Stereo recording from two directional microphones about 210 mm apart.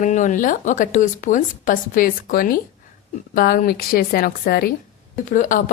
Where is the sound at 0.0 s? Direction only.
35° left (ahead or behind).